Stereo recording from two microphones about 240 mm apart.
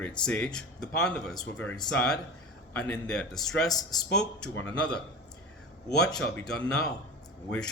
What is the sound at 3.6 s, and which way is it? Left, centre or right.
Speech, centre.